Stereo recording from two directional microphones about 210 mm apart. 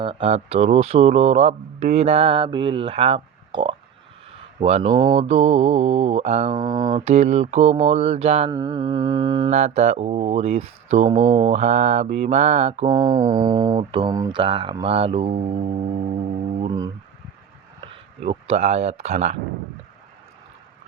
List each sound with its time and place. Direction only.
0.0 s mantra: 25° right (ahead or behind)
6.9 s speech: 30° right (ahead or behind)
8.4 s mantra: 20° right (ahead or behind)
9.5 s speech: 30° right (ahead or behind)
11.3 s mantra: 30° right (ahead or behind)
17.7 s speech: 30° right (ahead or behind)